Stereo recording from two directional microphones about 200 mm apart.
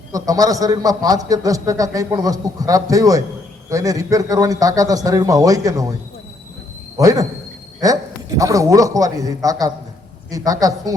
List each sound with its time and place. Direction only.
0.1 s a man's voice: 15° right (ahead or behind)
6.9 s a man's voice: 15° right (ahead or behind)